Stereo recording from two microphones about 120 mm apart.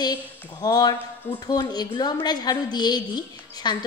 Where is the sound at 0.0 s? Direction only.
30° left (ahead or behind).